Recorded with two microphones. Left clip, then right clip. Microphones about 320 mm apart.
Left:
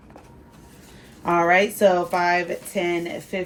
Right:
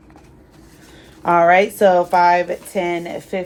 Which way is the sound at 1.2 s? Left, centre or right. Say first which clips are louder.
Right 6 dB; right.